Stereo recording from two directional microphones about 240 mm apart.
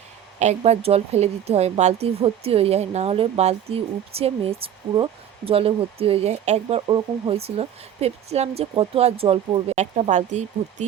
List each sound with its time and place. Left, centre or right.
0.3 s speech: right